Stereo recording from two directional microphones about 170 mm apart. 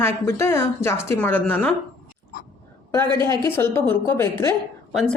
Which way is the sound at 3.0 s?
25° right (ahead or behind).